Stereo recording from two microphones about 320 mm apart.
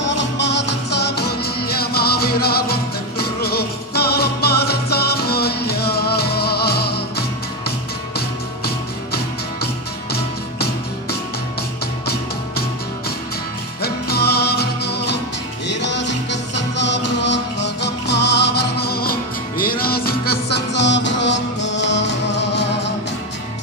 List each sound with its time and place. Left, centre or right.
0.0 s music: left
13.8 s music: left